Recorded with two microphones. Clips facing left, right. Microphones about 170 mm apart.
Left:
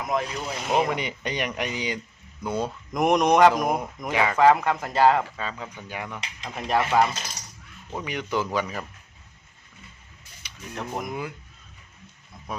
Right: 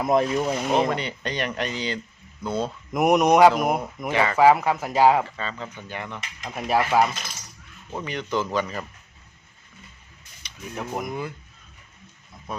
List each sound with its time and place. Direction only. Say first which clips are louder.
0.0 s speech: right 6 dB; 35° right (ahead or behind)
0.7 s speech: left 3 dB; 10° left (ahead or behind)
2.9 s speech: right 2 dB; 5° right (ahead or behind)
4.1 s speech: right 1 dB; 5° left (ahead or behind)
4.4 s speech: right 1 dB; 10° right (ahead or behind)
5.2 s speech: right 1 dB; 10° left (ahead or behind)
6.4 s speech: right 2 dB; 5° right (ahead or behind)
7.9 s speech: right 1 dB; 10° left (ahead or behind)
10.4 s a sound: even; 10° left (ahead or behind)
10.8 s speech: right 1 dB; centre (ahead or behind)
12.5 s speech: right 1 dB; 10° left (ahead or behind)